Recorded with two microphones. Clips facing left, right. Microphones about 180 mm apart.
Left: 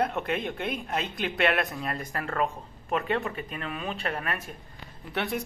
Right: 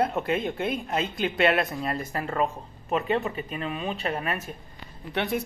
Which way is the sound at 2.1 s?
20° right (ahead or behind).